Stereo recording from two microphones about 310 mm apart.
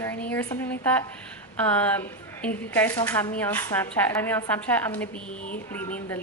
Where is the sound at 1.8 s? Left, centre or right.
Centre.